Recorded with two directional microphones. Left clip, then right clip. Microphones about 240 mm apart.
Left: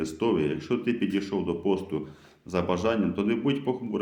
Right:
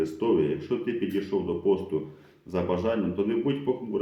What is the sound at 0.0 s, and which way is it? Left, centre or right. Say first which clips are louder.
Speech: right 2 dB; left.